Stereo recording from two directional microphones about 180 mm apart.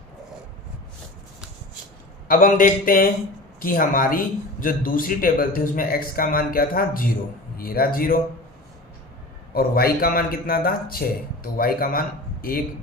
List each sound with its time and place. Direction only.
2.2 s a man's voice: 50° left (ahead or behind)
9.6 s a man's voice: 55° left (ahead or behind)